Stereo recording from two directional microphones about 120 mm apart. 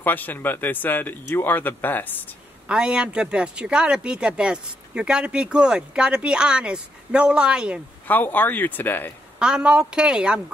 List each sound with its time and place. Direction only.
0.0 s speech: 15° left (ahead or behind)
2.7 s speech: 10° right (ahead or behind)
8.1 s speech: 15° left (ahead or behind)
9.4 s speech: 5° right (ahead or behind)